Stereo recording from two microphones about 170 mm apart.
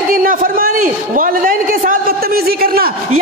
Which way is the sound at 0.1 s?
55° right (ahead or behind).